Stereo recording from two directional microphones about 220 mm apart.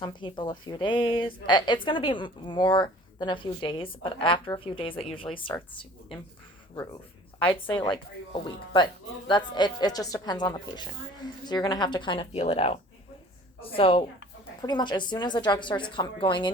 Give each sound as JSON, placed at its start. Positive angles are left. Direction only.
{"t": 0.0, "sound": "a woman's voice", "side_deg": 20}
{"t": 7.9, "sound": "a woman's voice", "side_deg": 20}